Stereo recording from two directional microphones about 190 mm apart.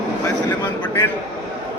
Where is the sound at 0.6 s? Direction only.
20° left (ahead or behind).